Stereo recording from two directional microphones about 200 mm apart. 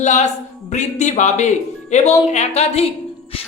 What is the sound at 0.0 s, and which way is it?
A man's voice, 35° left (ahead or behind).